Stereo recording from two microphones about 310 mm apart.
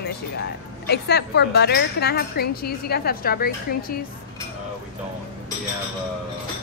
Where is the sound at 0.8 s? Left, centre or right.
Left.